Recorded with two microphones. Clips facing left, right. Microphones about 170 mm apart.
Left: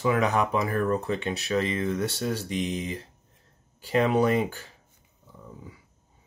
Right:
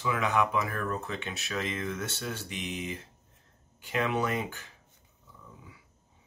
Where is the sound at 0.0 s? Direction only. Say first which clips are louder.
Left 4 dB; 40° left (ahead or behind).